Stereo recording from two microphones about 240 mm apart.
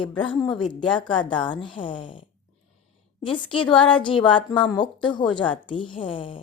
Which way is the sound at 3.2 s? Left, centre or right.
Left.